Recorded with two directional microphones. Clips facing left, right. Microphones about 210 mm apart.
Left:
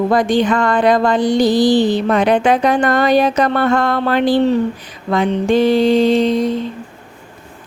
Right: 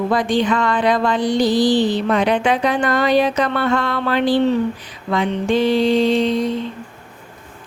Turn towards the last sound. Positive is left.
turn(degrees=45)  # may be behind; listen again after turning